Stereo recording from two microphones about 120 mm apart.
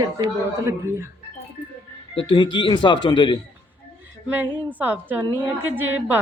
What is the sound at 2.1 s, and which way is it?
Speech, 40° left (ahead or behind).